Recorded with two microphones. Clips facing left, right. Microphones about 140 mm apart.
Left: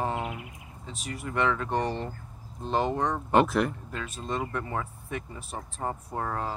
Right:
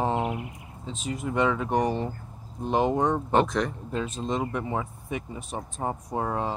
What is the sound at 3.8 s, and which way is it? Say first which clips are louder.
Speech: right 5 dB; 25° right (ahead or behind).